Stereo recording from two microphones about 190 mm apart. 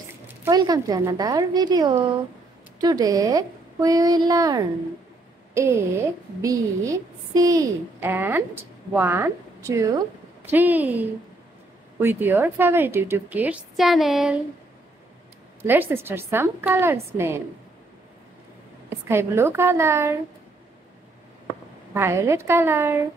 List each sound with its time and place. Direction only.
0.4 s a woman's voice: 20° right (ahead or behind); by 14.4 s centre (ahead or behind)
15.6 s a woman's voice: 10° right (ahead or behind)
18.9 s a woman's voice: 15° right (ahead or behind)
21.9 s a woman's voice: 15° right (ahead or behind)